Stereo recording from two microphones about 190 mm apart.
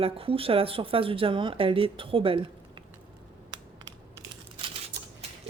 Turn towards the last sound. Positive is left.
turn(degrees=-30)  # may be behind; listen again after turning